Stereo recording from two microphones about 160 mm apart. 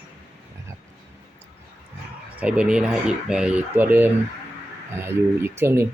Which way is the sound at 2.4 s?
5° right (ahead or behind).